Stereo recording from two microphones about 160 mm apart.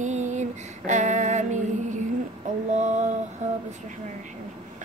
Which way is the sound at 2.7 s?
45° right (ahead or behind).